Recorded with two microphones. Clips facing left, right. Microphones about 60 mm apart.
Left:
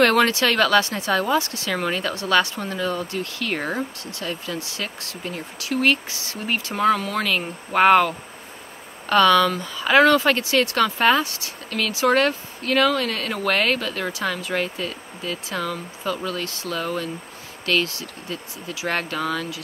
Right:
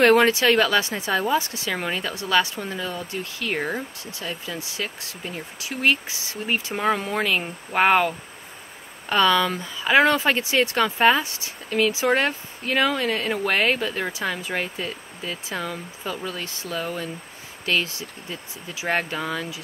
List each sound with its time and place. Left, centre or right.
0.0 s speech: centre
9.1 s speech: centre